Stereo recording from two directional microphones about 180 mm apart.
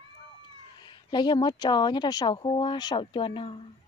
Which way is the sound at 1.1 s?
25° left (ahead or behind).